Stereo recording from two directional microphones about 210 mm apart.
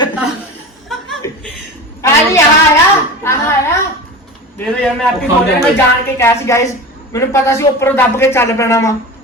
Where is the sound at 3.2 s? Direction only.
10° left (ahead or behind).